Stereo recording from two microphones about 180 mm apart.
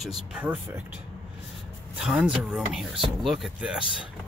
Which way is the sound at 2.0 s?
5° right (ahead or behind).